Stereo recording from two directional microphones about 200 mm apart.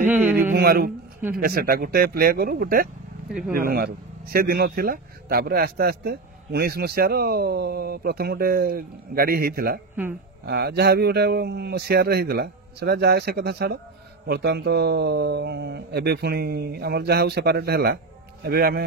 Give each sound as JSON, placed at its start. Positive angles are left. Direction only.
{"t": 0.0, "sound": "speech", "side_deg": -10}
{"t": 0.5, "sound": "speech", "side_deg": -45}